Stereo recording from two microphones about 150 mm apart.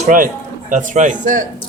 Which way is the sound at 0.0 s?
60° right (ahead or behind).